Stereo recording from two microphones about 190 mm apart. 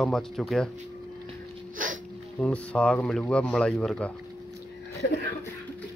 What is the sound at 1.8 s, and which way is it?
Hiccup, 45° right (ahead or behind).